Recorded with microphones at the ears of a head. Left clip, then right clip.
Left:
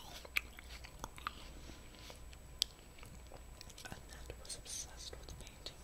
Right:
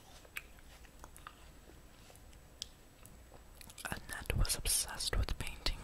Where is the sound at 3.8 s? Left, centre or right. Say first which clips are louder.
Right 13 dB; right.